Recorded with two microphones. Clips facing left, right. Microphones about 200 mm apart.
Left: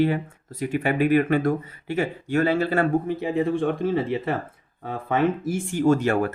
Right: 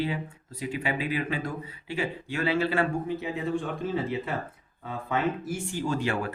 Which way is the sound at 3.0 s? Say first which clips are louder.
Left 7 dB; 55° left (ahead or behind).